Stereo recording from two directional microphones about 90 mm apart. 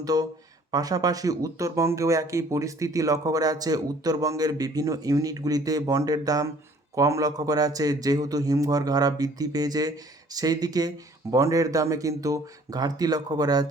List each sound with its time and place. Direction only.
0.0 s speech: 45° right (ahead or behind)